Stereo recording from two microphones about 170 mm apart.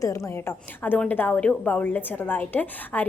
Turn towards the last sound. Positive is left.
turn(degrees=10)  # may be behind; listen again after turning